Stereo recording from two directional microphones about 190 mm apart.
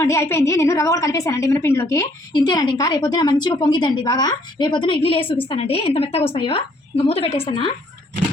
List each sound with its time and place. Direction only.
0.0 s a woman's voice: 15° left (ahead or behind)